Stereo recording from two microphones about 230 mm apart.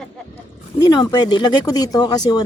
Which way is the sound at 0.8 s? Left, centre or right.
Centre.